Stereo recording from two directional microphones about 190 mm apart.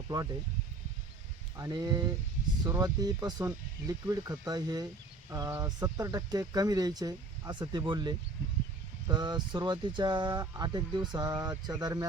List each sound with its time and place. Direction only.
0.1 s speech: 20° right (ahead or behind)
1.5 s speech: 20° right (ahead or behind)